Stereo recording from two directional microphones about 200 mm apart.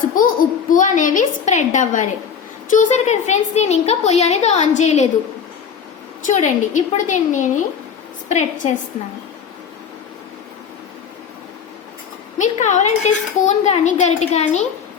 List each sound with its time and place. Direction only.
0.1 s a child's voice: 45° left (ahead or behind)
6.2 s a woman's voice: 35° left (ahead or behind)
12.4 s a woman's voice: 35° left (ahead or behind)